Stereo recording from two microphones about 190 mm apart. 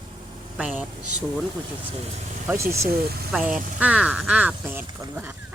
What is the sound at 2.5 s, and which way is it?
Speech, 15° right (ahead or behind).